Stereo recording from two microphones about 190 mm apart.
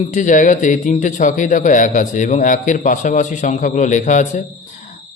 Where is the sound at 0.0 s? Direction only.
40° left (ahead or behind).